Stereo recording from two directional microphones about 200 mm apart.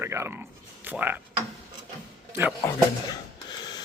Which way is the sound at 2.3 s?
10° right (ahead or behind).